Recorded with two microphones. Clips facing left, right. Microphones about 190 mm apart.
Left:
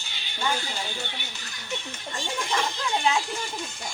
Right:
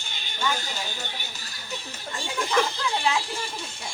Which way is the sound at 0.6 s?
40° right (ahead or behind).